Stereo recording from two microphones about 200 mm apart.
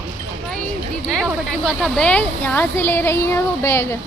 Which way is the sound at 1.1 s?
5° left (ahead or behind).